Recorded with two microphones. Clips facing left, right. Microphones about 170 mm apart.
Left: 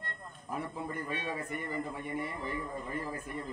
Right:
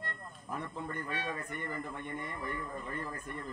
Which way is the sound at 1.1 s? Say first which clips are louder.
Left 2 dB; 10° left (ahead or behind).